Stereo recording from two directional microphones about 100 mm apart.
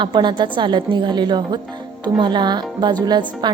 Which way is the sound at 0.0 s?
50° right (ahead or behind).